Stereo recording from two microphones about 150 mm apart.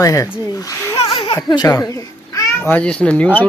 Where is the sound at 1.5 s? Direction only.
20° left (ahead or behind).